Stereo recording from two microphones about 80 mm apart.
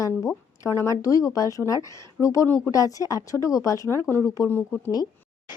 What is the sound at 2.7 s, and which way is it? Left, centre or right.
Speech, left.